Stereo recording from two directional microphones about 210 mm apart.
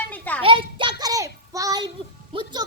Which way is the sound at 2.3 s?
20° right (ahead or behind).